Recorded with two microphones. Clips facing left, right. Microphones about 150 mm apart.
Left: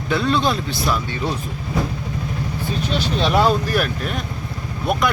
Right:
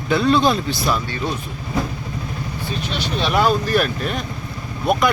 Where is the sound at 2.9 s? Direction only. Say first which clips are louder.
Left 2 dB; 35° left (ahead or behind).